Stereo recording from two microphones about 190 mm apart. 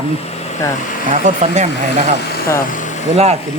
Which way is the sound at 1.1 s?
40° right (ahead or behind).